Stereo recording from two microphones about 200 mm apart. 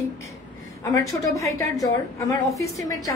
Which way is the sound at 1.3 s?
15° left (ahead or behind).